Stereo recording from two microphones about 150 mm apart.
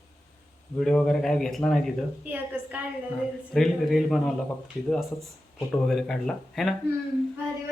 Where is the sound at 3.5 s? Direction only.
Centre (ahead or behind).